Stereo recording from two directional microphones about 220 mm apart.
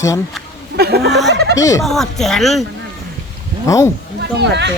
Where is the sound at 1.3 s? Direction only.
50° right (ahead or behind).